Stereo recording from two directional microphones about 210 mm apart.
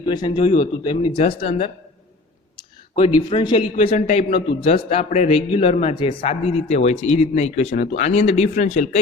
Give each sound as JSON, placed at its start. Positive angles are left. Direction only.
{"t": 0.0, "sound": "speech", "side_deg": 20}
{"t": 3.3, "sound": "a man's voice", "side_deg": 30}